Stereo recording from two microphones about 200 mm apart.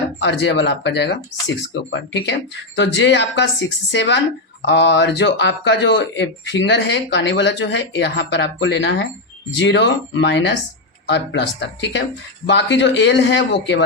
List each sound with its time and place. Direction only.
0.2 s speech: 60° left (ahead or behind)